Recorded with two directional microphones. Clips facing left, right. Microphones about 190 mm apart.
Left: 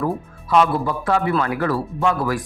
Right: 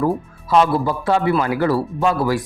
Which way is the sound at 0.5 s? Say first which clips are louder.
Right 2 dB; 30° right (ahead or behind).